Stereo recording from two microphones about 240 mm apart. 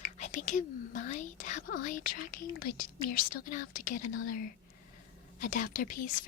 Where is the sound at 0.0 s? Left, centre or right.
Left.